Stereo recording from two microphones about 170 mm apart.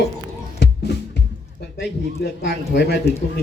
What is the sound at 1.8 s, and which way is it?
Speech, 75° left (ahead or behind).